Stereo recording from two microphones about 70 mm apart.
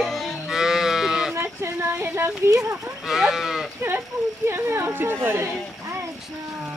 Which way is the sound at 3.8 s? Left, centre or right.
Right.